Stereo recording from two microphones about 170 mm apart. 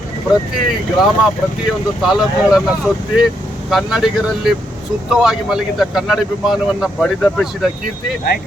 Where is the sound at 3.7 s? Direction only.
Centre (ahead or behind).